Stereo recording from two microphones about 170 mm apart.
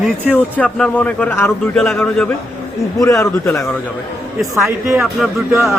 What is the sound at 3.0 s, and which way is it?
Speech, 20° left (ahead or behind).